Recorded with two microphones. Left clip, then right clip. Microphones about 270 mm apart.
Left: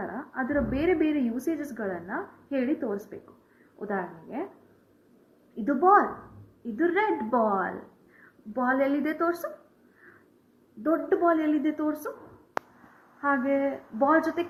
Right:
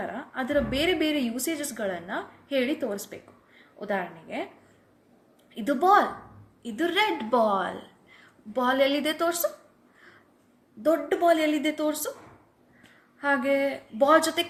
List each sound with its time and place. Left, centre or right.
0.0 s a woman's voice: right
5.6 s a woman's voice: right
10.9 s a woman's voice: right
13.2 s a woman's voice: right